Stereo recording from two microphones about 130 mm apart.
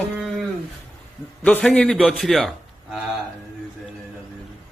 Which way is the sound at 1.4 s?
10° left (ahead or behind).